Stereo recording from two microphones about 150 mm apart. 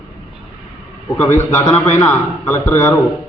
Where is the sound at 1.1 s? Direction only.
15° left (ahead or behind).